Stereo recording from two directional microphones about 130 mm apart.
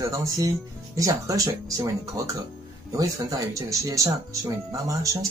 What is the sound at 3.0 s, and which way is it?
Speech, 25° right (ahead or behind).